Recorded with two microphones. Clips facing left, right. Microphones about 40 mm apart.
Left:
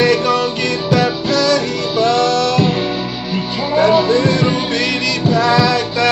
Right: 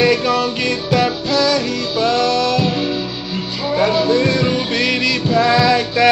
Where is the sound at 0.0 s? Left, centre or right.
Centre.